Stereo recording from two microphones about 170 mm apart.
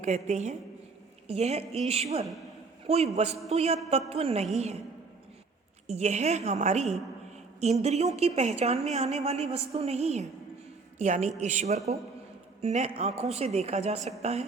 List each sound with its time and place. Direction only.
0.0 s a woman's voice: 40° right (ahead or behind)
5.9 s a woman's voice: 40° right (ahead or behind)